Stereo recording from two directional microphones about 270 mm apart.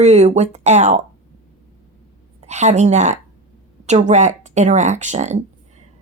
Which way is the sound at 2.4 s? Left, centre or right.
Right.